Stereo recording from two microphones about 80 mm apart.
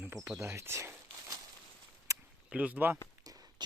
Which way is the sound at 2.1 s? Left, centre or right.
Right.